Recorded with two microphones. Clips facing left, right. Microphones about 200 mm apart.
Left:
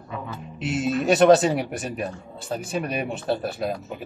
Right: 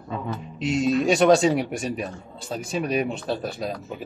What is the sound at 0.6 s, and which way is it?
Speech, 5° left (ahead or behind).